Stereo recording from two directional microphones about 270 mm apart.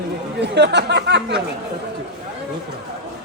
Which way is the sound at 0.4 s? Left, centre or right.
Right.